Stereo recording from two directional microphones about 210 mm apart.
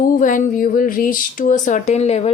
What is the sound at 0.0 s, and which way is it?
Speech, 40° left (ahead or behind).